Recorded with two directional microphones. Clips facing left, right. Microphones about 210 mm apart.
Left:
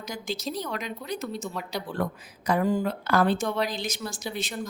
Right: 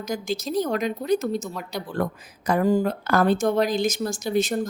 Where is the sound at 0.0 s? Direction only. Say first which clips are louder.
Right 5 dB; 45° right (ahead or behind).